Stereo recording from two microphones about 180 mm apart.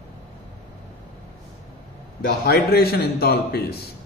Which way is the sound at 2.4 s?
60° left (ahead or behind).